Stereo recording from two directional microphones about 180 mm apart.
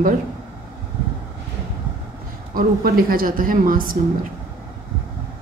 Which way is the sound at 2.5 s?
55° right (ahead or behind).